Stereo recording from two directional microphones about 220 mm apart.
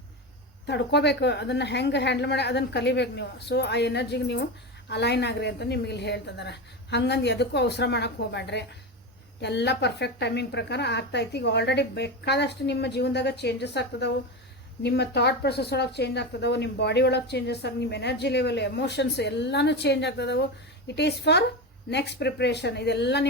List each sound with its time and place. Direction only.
0.7 s a woman's voice: 50° left (ahead or behind)